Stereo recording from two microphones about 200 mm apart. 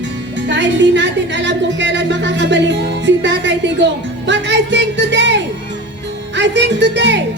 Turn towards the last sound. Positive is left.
turn(degrees=-65)  # may be behind; listen again after turning